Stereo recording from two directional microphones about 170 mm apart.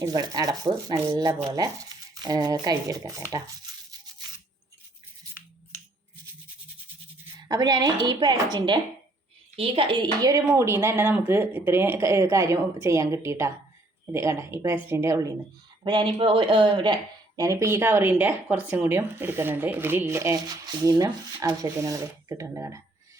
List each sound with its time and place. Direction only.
0.0 s speech: 25° right (ahead or behind)
7.4 s speech: 25° right (ahead or behind)
15.8 s speech: 30° right (ahead or behind)